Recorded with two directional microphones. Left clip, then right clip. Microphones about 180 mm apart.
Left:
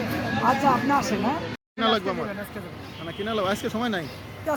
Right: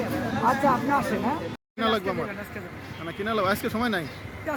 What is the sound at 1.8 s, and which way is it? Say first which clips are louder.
Speech: left 2 dB; 5° right (ahead or behind).